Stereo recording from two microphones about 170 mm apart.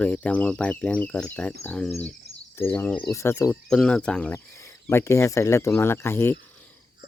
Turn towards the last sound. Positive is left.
turn(degrees=15)  # may be behind; listen again after turning